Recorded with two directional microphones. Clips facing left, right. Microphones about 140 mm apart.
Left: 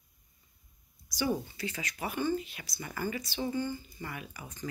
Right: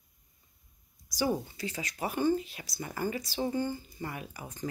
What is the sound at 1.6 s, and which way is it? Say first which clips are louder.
Speech: right 2 dB; 35° right (ahead or behind).